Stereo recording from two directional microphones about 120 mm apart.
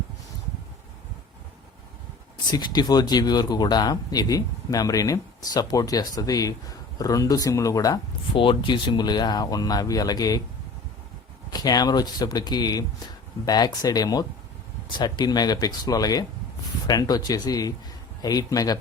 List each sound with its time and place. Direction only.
2.5 s speech: 35° left (ahead or behind)
8.4 s speech: 40° left (ahead or behind)
11.5 s speech: 35° left (ahead or behind)